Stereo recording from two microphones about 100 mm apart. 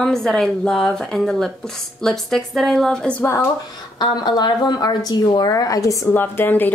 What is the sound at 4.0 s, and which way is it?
A woman's voice, 45° left (ahead or behind).